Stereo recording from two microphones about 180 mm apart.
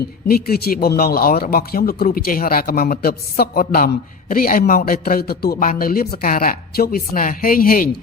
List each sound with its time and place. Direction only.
0.3 s speech: 60° left (ahead or behind)